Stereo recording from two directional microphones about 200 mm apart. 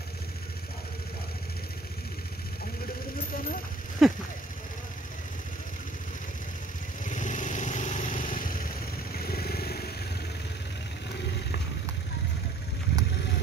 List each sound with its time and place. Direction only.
4.0 s a sound: centre (ahead or behind)
7.1 s vehicle: 40° left (ahead or behind)
9.1 s motorcycle: 50° left (ahead or behind)